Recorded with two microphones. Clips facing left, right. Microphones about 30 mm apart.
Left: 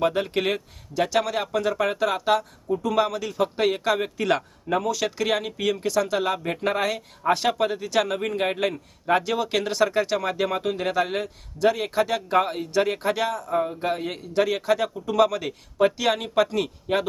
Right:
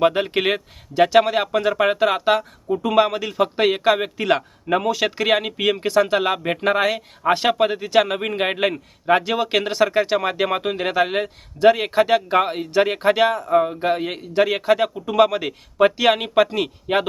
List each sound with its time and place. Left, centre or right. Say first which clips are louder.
0.0 s a man's voice: right 5 dB; right
4.8 s a man's voice: right 4 dB; right